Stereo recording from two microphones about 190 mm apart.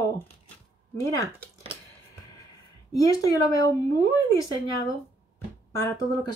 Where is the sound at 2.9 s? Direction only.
20° left (ahead or behind).